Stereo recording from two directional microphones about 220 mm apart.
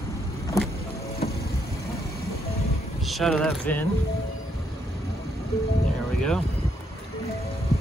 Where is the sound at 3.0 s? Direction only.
Centre (ahead or behind).